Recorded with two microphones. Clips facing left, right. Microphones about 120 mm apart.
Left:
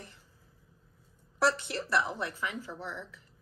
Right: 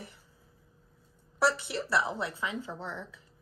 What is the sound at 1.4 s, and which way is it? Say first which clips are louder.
A woman's voice: right 1 dB; 10° right (ahead or behind).